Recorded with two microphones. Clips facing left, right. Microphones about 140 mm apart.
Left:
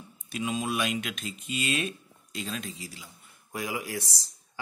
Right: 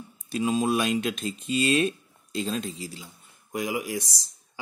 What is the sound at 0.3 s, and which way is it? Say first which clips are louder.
Speech: right 6 dB; 35° right (ahead or behind).